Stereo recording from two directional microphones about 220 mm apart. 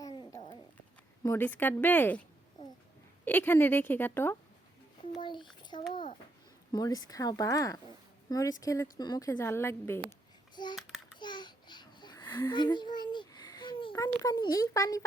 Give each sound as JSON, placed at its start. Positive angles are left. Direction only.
{"t": 0.0, "sound": "a sound", "side_deg": 20}
{"t": 1.2, "sound": "a woman's voice", "side_deg": 10}
{"t": 3.2, "sound": "a woman's voice", "side_deg": 10}
{"t": 5.1, "sound": "a child's voice", "side_deg": 20}
{"t": 10.1, "sound": "babbling", "side_deg": 20}
{"t": 10.8, "sound": "a sound", "side_deg": 0}
{"t": 11.2, "sound": "babbling", "side_deg": 20}